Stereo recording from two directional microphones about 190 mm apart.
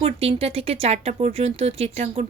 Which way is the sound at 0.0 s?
30° right (ahead or behind).